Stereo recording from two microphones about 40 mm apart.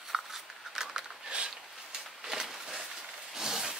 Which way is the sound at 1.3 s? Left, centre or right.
Right.